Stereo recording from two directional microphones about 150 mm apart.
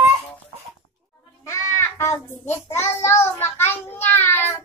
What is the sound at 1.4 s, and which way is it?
Goat, 20° left (ahead or behind).